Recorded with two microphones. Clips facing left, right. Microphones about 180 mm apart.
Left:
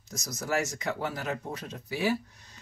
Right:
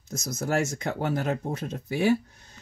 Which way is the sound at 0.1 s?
50° right (ahead or behind).